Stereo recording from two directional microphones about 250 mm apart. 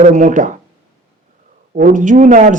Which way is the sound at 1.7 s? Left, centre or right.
Right.